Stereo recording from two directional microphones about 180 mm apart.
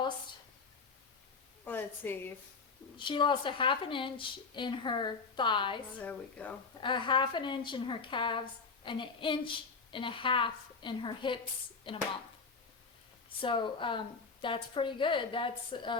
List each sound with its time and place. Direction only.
1.6 s a woman's voice: 10° left (ahead or behind)
3.0 s a woman's voice: 25° left (ahead or behind)
6.0 s a woman's voice: 10° left (ahead or behind)
6.8 s a woman's voice: 25° left (ahead or behind)
13.4 s a woman's voice: 25° left (ahead or behind)